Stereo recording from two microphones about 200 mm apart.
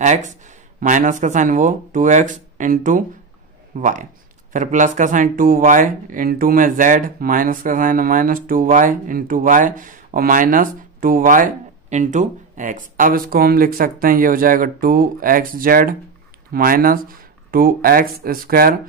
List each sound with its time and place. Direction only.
0.0 s speech: 35° right (ahead or behind)